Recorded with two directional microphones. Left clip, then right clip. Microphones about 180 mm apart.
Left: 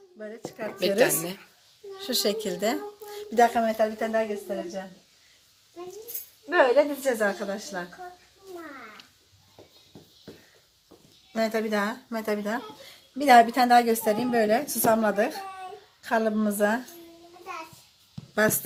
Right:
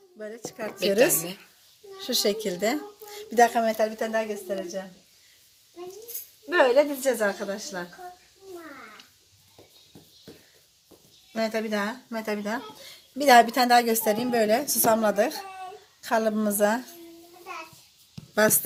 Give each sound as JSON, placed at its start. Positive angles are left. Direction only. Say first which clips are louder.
{"t": 0.2, "sound": "a woman's voice", "louder": "right 1 dB", "side_deg": -65}
{"t": 0.8, "sound": "speech", "louder": "right 1 dB", "side_deg": 10}
{"t": 2.0, "sound": "speech", "louder": "right 1 dB", "side_deg": -40}
{"t": 6.5, "sound": "speech", "louder": "even", "side_deg": -55}
{"t": 11.3, "sound": "speech", "louder": "left 1 dB", "side_deg": -25}
{"t": 12.5, "sound": "a woman's voice", "louder": "even", "side_deg": -55}
{"t": 18.3, "sound": "speech", "louder": "right 2 dB", "side_deg": -50}